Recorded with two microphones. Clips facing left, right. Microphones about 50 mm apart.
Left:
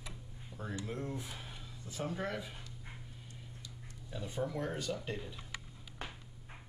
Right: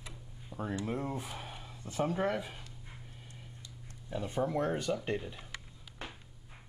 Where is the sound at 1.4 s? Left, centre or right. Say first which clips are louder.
Right 4 dB; right.